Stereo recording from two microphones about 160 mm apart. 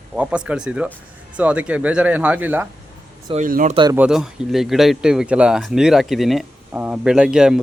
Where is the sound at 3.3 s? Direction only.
55° right (ahead or behind).